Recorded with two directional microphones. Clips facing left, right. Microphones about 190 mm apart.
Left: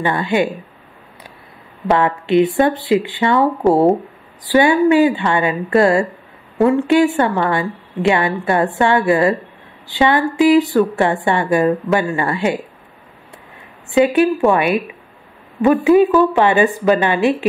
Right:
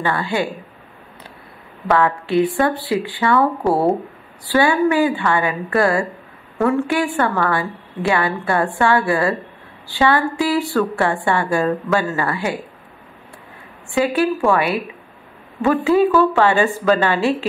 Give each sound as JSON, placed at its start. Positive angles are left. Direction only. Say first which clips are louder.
{"t": 0.0, "sound": "a woman's voice", "louder": "left 4 dB", "side_deg": 20}
{"t": 1.9, "sound": "a woman's voice", "louder": "left 2 dB", "side_deg": 20}
{"t": 13.8, "sound": "a woman's voice", "louder": "left 5 dB", "side_deg": 20}